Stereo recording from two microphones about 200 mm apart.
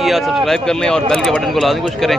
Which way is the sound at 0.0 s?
Centre (ahead or behind).